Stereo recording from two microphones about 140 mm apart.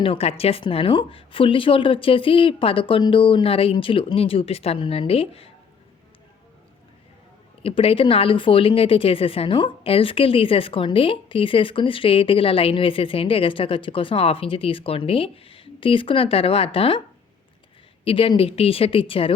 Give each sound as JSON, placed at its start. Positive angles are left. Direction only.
{"t": 0.0, "sound": "speech", "side_deg": 45}
{"t": 7.6, "sound": "speech", "side_deg": 45}
{"t": 18.0, "sound": "speech", "side_deg": 40}